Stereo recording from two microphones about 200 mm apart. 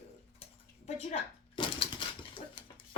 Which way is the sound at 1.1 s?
25° left (ahead or behind).